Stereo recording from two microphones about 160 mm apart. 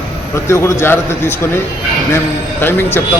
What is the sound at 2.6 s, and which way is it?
Speech, 15° left (ahead or behind).